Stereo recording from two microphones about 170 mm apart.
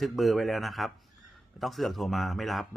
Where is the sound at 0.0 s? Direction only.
Centre (ahead or behind).